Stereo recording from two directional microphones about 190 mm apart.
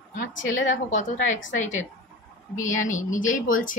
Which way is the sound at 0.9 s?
40° left (ahead or behind).